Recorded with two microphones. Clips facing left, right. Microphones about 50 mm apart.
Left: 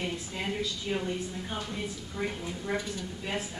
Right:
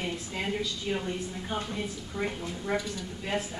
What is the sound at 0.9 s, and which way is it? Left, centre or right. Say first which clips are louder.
Speech: right 1 dB; centre.